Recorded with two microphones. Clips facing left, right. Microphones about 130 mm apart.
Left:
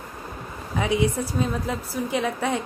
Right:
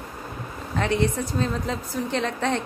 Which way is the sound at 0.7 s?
10° left (ahead or behind).